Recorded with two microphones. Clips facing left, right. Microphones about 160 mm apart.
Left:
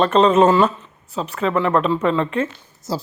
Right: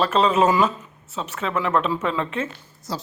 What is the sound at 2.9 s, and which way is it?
Speech, 30° left (ahead or behind).